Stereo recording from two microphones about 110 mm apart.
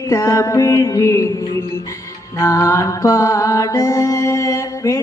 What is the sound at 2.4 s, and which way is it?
Mantra, 25° left (ahead or behind).